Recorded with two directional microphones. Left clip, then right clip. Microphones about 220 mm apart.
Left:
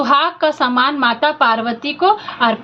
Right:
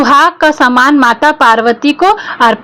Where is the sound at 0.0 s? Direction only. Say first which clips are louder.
Right 7 dB; 45° right (ahead or behind).